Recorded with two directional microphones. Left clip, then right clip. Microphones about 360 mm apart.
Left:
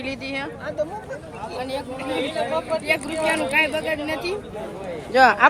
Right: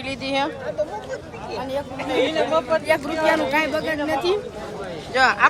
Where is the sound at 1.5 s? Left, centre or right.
Right.